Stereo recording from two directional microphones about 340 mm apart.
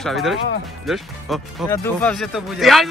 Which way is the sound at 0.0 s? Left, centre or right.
Centre.